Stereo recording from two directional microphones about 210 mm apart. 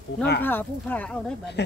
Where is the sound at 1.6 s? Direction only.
55° left (ahead or behind).